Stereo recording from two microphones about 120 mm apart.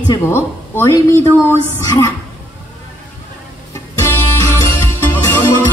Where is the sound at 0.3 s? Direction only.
20° left (ahead or behind).